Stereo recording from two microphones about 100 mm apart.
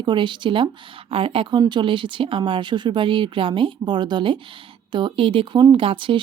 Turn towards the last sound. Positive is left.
turn(degrees=-55)  # may be behind; listen again after turning